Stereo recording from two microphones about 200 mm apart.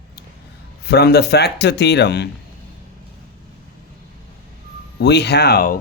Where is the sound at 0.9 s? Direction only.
55° left (ahead or behind).